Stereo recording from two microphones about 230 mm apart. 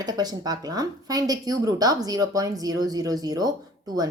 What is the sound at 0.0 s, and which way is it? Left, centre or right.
A woman's voice, centre.